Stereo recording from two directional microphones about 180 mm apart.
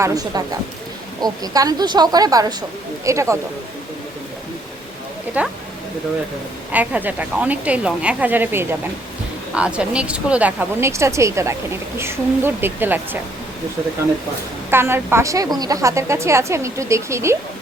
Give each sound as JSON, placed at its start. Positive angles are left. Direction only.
{"t": 0.0, "sound": "a woman's voice", "side_deg": -20}
{"t": 5.4, "sound": "speech", "side_deg": -10}
{"t": 6.7, "sound": "speech", "side_deg": -10}
{"t": 14.7, "sound": "speech", "side_deg": -15}